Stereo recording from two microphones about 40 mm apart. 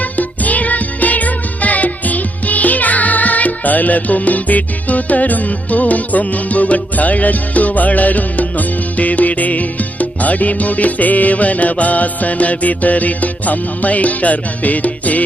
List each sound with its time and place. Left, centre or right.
0.0 s music: left